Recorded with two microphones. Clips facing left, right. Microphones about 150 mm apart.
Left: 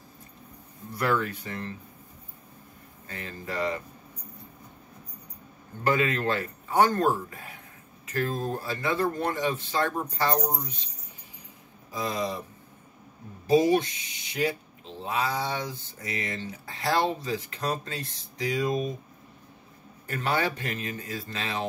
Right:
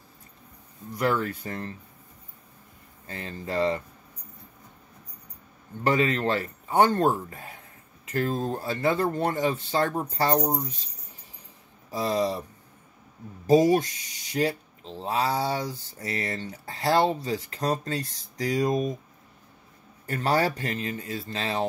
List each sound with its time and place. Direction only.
1.1 s speech: 35° right (ahead or behind)
3.1 s speech: 30° right (ahead or behind)
5.9 s speech: 30° right (ahead or behind)
11.9 s speech: 35° right (ahead or behind)
13.5 s speech: 40° right (ahead or behind)
20.1 s speech: 35° right (ahead or behind)